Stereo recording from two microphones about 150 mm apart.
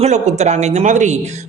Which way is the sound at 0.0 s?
50° right (ahead or behind).